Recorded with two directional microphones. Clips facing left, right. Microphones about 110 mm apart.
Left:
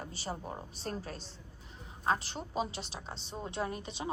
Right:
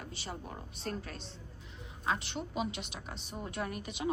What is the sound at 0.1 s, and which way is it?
A woman's voice, 35° left (ahead or behind).